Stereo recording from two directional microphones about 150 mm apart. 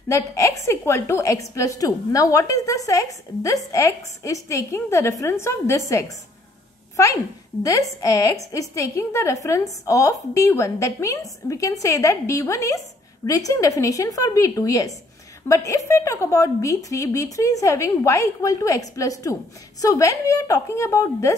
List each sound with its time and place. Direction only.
0.1 s a woman's voice: 20° left (ahead or behind)
7.6 s a woman's voice: 20° left (ahead or behind)